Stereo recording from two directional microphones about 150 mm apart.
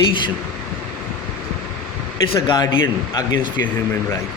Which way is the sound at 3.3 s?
60° right (ahead or behind).